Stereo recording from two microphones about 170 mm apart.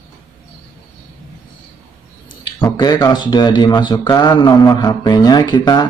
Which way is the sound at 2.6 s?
20° left (ahead or behind).